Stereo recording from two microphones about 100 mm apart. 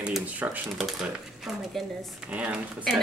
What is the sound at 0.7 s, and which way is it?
Speech, 5° right (ahead or behind).